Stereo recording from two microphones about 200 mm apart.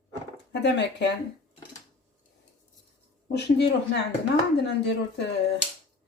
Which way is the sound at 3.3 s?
60° left (ahead or behind).